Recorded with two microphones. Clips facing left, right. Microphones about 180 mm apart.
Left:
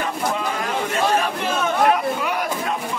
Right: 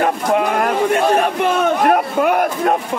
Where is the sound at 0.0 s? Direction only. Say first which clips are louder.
Right 8 dB; 60° right (ahead or behind).